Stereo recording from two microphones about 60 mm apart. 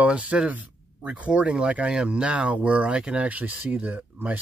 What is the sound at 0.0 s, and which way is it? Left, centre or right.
Speech, right.